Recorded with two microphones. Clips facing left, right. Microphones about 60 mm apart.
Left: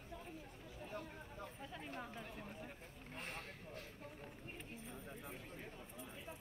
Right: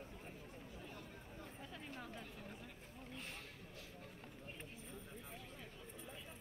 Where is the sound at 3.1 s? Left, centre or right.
Left.